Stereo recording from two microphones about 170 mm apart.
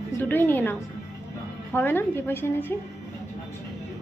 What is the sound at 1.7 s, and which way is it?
A woman's voice, 10° left (ahead or behind).